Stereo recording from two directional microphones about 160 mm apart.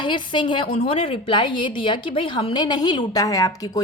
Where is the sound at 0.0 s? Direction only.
30° left (ahead or behind).